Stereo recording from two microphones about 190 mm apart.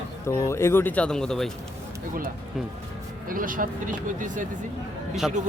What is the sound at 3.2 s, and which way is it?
Speech, 45° right (ahead or behind).